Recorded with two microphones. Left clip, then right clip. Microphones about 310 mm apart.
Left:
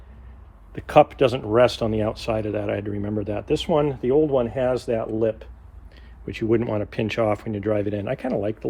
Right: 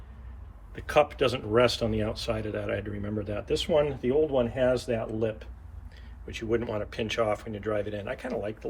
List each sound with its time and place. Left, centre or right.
0.7 s speech: left